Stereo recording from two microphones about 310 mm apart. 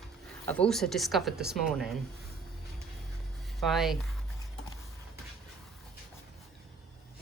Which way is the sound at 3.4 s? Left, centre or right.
Centre.